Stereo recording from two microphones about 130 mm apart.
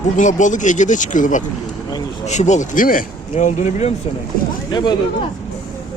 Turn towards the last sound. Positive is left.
turn(degrees=35)  # may be behind; listen again after turning